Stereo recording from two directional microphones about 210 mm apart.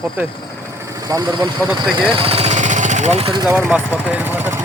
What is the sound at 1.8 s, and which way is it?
Jackhammer, 25° right (ahead or behind).